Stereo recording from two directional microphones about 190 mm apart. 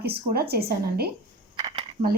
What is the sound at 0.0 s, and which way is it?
A woman's voice, 55° right (ahead or behind).